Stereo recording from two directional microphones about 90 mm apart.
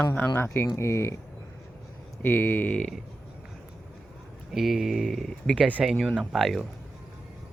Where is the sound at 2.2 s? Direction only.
20° left (ahead or behind).